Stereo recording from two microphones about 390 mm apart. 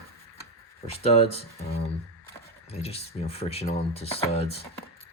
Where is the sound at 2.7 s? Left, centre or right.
Centre.